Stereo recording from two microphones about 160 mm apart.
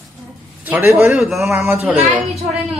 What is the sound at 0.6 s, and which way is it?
Speech, 15° right (ahead or behind).